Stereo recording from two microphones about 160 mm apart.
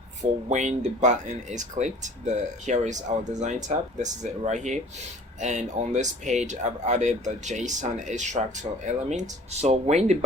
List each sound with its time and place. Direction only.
0.2 s speech: 50° right (ahead or behind)